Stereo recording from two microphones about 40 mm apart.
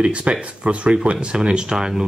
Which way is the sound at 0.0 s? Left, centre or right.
Right.